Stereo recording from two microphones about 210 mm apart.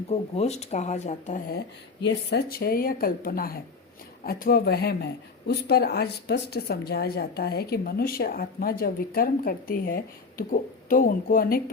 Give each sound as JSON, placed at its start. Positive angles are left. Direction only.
{"t": 0.1, "sound": "a woman's voice", "side_deg": 30}